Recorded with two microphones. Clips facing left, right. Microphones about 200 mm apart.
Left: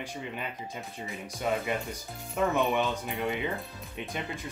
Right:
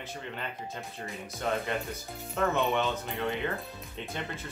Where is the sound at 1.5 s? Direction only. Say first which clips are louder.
Left 1 dB; 10° left (ahead or behind).